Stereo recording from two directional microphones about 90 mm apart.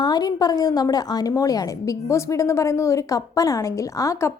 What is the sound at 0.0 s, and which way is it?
A woman's voice, 50° left (ahead or behind).